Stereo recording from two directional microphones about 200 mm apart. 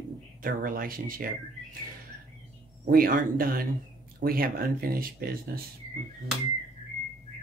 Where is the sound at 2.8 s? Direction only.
45° right (ahead or behind).